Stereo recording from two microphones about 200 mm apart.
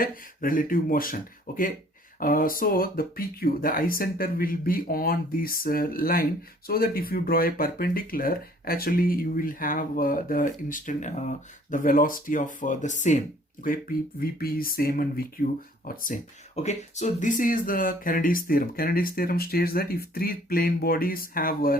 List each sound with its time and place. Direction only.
0.0 s speech: 45° left (ahead or behind)